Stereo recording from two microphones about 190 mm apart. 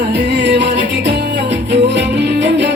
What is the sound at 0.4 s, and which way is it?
Music, 65° right (ahead or behind).